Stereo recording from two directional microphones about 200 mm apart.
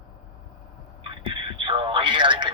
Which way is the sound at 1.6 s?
25° right (ahead or behind).